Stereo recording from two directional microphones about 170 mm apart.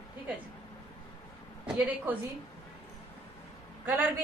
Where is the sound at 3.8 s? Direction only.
10° right (ahead or behind).